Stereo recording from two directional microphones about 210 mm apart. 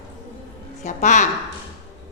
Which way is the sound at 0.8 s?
35° left (ahead or behind).